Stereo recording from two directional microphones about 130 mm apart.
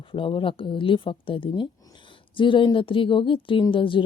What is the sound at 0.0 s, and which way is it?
A woman's voice, 40° left (ahead or behind).